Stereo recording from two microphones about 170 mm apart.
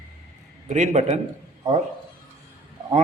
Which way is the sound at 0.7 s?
40° right (ahead or behind).